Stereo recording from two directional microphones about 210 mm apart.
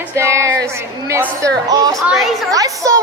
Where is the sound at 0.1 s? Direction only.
15° right (ahead or behind).